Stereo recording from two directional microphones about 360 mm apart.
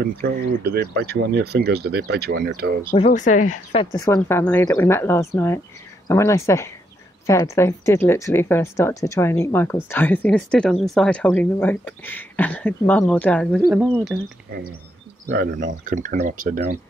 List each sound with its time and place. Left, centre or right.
0.0 s speech: right
2.9 s speech: left
3.9 s speech: centre
15.3 s speech: right